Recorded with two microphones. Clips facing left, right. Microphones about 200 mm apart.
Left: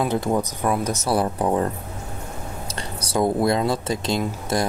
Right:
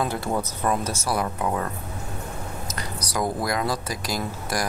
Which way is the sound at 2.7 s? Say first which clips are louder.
Left 6 dB; 30° left (ahead or behind).